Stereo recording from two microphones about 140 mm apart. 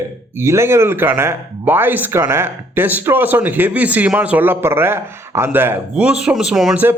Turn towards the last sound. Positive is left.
turn(degrees=-5)  # may be behind; listen again after turning